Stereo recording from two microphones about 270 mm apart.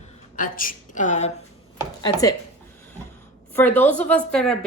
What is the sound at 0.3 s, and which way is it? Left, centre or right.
Speech, left.